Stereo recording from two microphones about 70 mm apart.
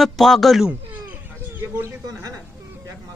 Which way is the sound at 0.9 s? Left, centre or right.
Right.